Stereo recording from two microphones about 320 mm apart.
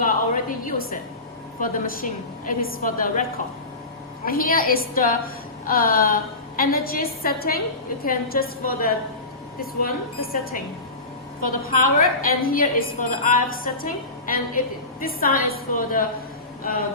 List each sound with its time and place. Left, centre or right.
0.0 s a woman's voice: left